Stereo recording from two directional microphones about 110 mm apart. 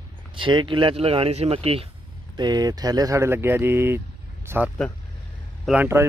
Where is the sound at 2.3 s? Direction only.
40° right (ahead or behind); by 4.7 s 15° right (ahead or behind).